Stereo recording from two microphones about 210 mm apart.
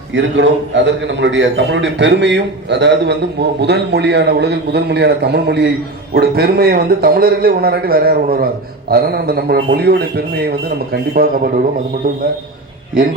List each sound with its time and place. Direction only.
0.1 s a man's voice: 60° right (ahead or behind); by 11.6 s 45° right (ahead or behind)